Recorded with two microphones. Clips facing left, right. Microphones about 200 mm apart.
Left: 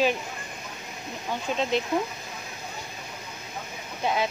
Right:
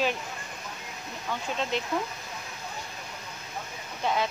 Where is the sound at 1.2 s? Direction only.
20° left (ahead or behind).